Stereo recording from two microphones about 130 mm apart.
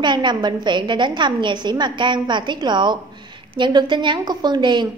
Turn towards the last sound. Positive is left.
turn(degrees=-35)  # may be behind; listen again after turning